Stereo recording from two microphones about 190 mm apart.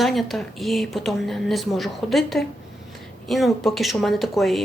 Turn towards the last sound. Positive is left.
turn(degrees=0)  # may be behind; listen again after turning